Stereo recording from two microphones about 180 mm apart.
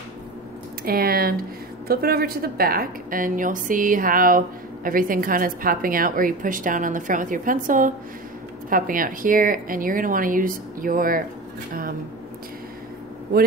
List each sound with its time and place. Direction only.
0.8 s a woman's voice: 55° right (ahead or behind)